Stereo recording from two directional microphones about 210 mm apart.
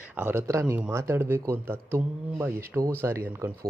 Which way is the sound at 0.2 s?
10° right (ahead or behind).